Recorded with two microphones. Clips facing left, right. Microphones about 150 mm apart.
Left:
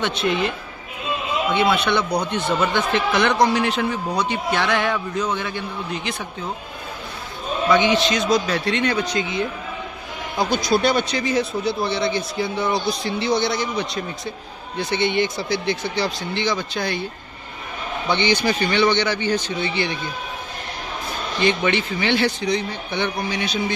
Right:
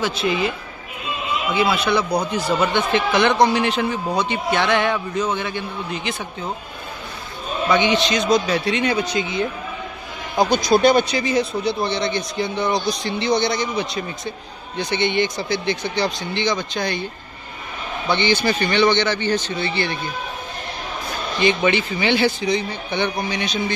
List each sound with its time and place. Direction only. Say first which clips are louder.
0.0 s a man's voice: right 1 dB; centre (ahead or behind)
7.7 s a man's voice: even; centre (ahead or behind); by 11.1 s 15° right (ahead or behind)
11.1 s a man's voice: right 1 dB; centre (ahead or behind)
18.0 s speech: right 1 dB; 15° left (ahead or behind)
21.4 s a man's voice: right 2 dB; centre (ahead or behind)